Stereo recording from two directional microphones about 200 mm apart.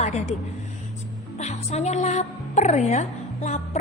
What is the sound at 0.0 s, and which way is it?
Speech, 35° left (ahead or behind).